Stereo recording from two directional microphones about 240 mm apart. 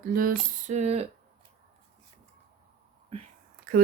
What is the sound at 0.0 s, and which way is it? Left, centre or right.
Speech, right.